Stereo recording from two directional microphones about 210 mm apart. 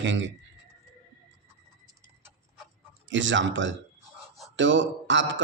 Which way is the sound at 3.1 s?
60° right (ahead or behind).